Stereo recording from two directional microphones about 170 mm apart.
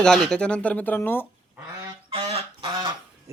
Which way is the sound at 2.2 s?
35° right (ahead or behind).